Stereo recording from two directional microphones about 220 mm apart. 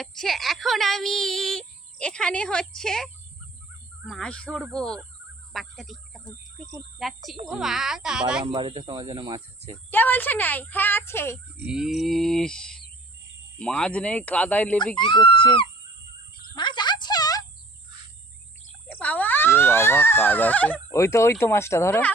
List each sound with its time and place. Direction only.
0.0 s speech: centre (ahead or behind)
8.4 s speech: 25° right (ahead or behind)
9.6 s speech: 10° left (ahead or behind)
11.5 s speech: centre (ahead or behind)
15.0 s speech: 20° left (ahead or behind)
16.6 s a sound: 20° left (ahead or behind)
18.9 s speech: 5° left (ahead or behind)